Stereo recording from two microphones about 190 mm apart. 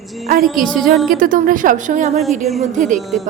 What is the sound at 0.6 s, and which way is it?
A woman's voice, 45° right (ahead or behind).